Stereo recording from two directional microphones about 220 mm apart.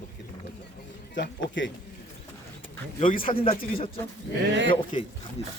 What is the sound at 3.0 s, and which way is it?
Speech, 40° left (ahead or behind).